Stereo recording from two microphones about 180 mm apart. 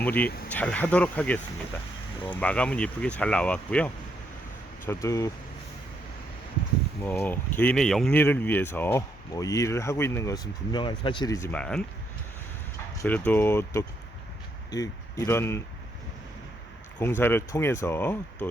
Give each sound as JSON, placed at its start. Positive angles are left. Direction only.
{"t": 0.0, "sound": "speech", "side_deg": 10}
{"t": 4.9, "sound": "speech", "side_deg": 15}
{"t": 7.0, "sound": "speech", "side_deg": 10}
{"t": 13.0, "sound": "speech", "side_deg": 10}
{"t": 17.0, "sound": "speech", "side_deg": 15}